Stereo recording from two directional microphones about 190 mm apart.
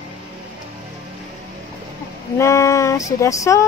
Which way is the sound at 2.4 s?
15° left (ahead or behind).